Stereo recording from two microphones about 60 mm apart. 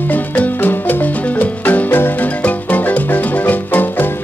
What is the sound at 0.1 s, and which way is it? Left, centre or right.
Music, left.